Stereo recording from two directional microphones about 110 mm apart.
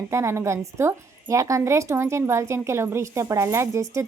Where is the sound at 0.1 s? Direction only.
25° right (ahead or behind).